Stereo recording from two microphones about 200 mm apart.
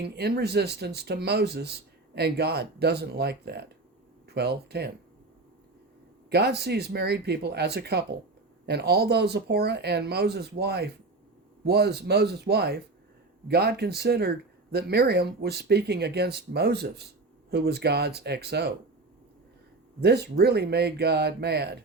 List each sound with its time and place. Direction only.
0.0 s speech: 55° right (ahead or behind)
6.3 s speech: 55° right (ahead or behind)
20.0 s speech: 55° right (ahead or behind)